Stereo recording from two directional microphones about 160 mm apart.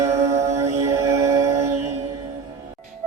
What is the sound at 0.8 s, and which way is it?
Music, 20° right (ahead or behind).